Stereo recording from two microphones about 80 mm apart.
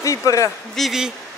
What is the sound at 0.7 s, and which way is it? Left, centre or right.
Speech, centre.